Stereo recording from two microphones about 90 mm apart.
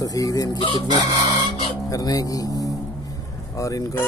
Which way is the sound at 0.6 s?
65° left (ahead or behind).